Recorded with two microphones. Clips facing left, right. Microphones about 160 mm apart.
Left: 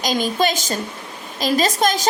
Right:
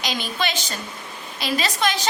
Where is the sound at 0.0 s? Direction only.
40° left (ahead or behind).